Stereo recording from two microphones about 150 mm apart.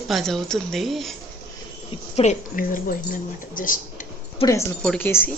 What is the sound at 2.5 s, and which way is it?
A woman's voice, 65° left (ahead or behind).